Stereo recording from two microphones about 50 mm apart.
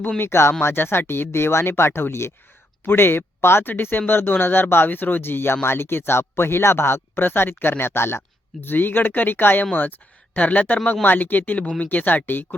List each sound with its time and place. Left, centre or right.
0.2 s speech: left
8.6 s speech: left